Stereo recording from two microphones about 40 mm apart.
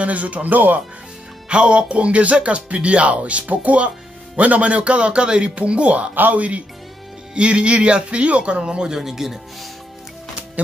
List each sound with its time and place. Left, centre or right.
0.0 s speech: right
1.5 s speech: right
6.1 s speech: right
7.3 s speech: right
8.9 s speech: centre